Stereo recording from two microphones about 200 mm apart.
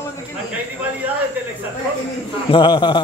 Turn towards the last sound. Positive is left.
turn(degrees=20)  # may be behind; listen again after turning